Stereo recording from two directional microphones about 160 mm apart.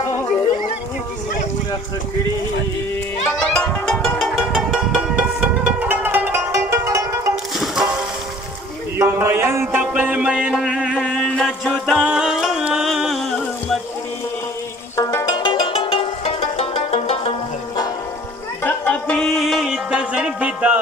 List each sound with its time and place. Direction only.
3.3 s music: 5° left (ahead or behind); by 7.3 s 20° right (ahead or behind)
7.5 s music: centre (ahead or behind)
8.9 s music: 15° right (ahead or behind); by 13.2 s centre (ahead or behind)
15.0 s music: 20° left (ahead or behind); by 17.3 s 40° left (ahead or behind)
18.6 s music: 10° left (ahead or behind); by 20.8 s 10° right (ahead or behind)